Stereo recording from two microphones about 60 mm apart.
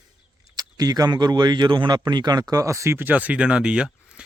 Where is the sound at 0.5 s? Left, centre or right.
Right.